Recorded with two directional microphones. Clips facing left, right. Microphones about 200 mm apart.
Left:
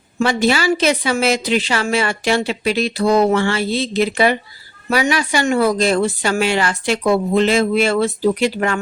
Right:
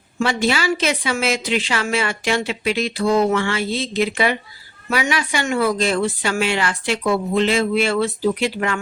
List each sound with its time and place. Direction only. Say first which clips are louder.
0.2 s a woman's voice: left 3 dB; 40° left (ahead or behind)